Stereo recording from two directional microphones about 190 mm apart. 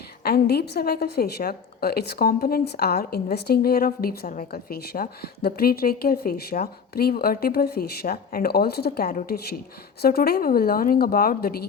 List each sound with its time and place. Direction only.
0.2 s a woman's voice: 55° left (ahead or behind)